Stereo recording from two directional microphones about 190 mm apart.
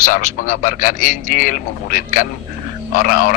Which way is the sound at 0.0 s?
45° left (ahead or behind).